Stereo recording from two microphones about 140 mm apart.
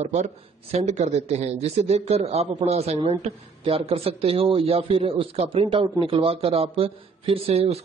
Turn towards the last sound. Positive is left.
turn(degrees=-45)  # may be behind; listen again after turning